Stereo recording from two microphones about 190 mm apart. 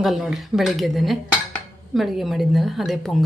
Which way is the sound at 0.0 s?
Centre (ahead or behind).